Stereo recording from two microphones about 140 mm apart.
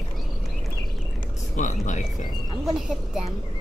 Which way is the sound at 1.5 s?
65° left (ahead or behind).